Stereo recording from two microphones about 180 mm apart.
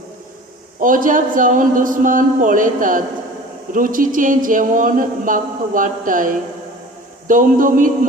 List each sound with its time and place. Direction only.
0.8 s speech: 50° right (ahead or behind)